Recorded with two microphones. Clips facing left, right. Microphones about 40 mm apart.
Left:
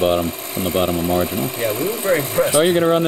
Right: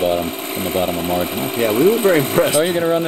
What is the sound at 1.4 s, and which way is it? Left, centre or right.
Speech, right.